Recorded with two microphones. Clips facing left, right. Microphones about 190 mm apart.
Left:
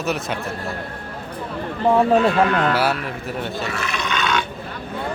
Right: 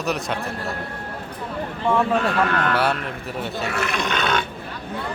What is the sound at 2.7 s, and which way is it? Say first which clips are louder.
Speech: left 1 dB; 5° left (ahead or behind).